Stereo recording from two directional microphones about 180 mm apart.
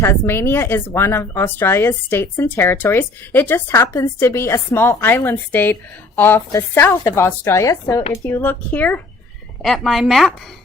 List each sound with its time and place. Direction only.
0.0 s a woman's voice: 15° left (ahead or behind)